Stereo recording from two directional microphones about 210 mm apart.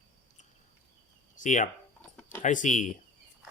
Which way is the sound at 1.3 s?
35° left (ahead or behind).